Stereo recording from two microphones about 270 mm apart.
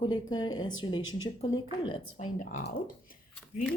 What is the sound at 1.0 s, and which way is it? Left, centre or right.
Speech, left.